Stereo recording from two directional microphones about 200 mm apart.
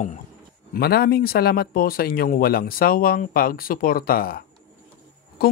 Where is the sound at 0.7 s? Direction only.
50° left (ahead or behind).